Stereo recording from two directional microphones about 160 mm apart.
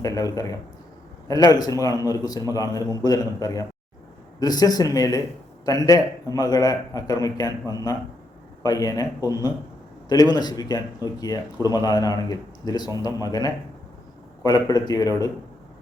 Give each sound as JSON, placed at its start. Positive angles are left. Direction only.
{"t": 0.0, "sound": "a man's voice", "side_deg": 20}
{"t": 1.5, "sound": "a man's voice", "side_deg": 25}